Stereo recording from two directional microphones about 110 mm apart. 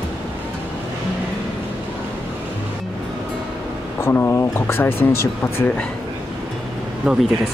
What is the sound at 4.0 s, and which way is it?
Speech, 20° left (ahead or behind).